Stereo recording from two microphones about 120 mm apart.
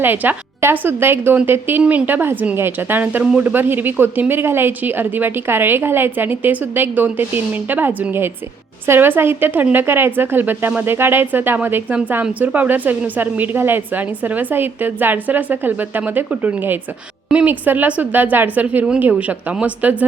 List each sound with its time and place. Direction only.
0.0 s speech: 15° right (ahead or behind)